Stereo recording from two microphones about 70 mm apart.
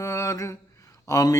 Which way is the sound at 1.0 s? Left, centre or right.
Left.